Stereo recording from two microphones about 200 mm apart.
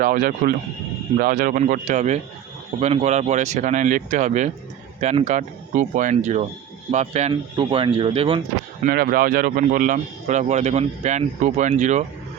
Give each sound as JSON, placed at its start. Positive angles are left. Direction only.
{"t": 0.0, "sound": "a man's voice", "side_deg": -45}
{"t": 8.8, "sound": "a man's voice", "side_deg": -50}